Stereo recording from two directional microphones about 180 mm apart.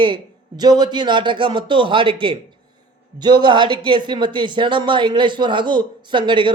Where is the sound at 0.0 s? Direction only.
25° right (ahead or behind).